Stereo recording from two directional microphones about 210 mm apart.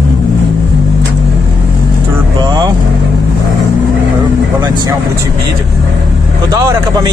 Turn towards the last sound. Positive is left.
turn(degrees=-15)  # may be behind; listen again after turning